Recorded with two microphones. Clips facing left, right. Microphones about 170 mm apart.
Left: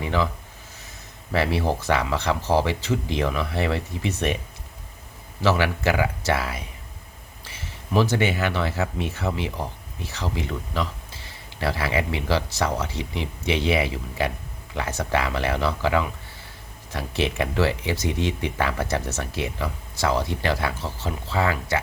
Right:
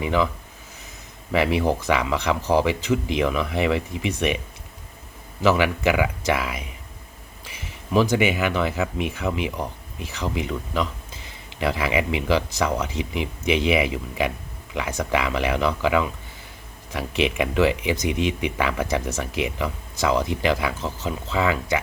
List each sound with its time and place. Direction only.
0.0 s speech: 15° right (ahead or behind)
1.3 s speech: 15° right (ahead or behind)
5.4 s speech: 15° right (ahead or behind)